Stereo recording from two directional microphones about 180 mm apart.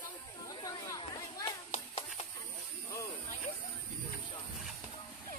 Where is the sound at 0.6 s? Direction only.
20° left (ahead or behind).